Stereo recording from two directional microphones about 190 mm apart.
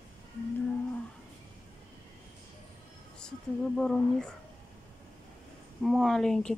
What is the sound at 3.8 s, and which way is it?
Speech, 5° left (ahead or behind).